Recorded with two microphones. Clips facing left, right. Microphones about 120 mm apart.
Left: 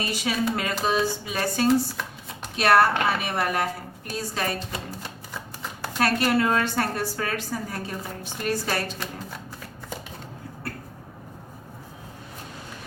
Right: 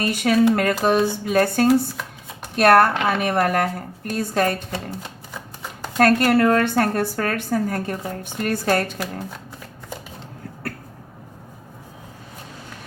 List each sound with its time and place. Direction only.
0.0 s a woman's voice: 55° right (ahead or behind)
6.0 s a woman's voice: 50° right (ahead or behind)